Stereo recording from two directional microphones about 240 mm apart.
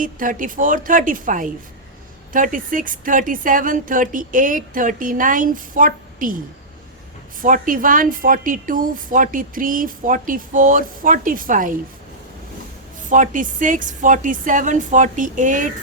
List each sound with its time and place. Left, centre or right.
0.0 s a woman's voice: right
7.4 s a woman's voice: right
13.1 s a woman's voice: right